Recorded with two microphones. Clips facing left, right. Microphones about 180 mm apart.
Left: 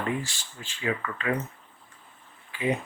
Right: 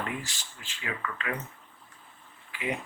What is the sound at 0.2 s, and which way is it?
Speech, 30° left (ahead or behind).